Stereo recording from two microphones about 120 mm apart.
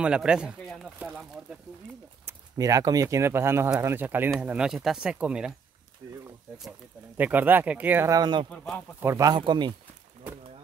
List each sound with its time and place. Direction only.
0.0 s speech: 10° right (ahead or behind)
2.5 s speech: 30° right (ahead or behind); by 5.5 s 5° right (ahead or behind)
7.2 s speech: 15° right (ahead or behind)
8.1 s speech: 40° right (ahead or behind)
8.5 s a man's voice: 10° left (ahead or behind)
9.0 s speech: 25° right (ahead or behind)
9.4 s speech: 40° right (ahead or behind)